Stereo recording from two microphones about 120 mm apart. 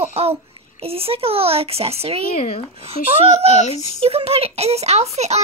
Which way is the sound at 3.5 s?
70° left (ahead or behind).